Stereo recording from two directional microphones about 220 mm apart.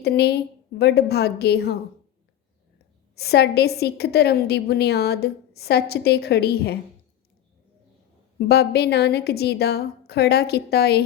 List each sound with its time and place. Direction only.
0.0 s a woman's voice: 45° left (ahead or behind)
3.2 s a woman's voice: 45° left (ahead or behind)
8.4 s a woman's voice: 45° left (ahead or behind)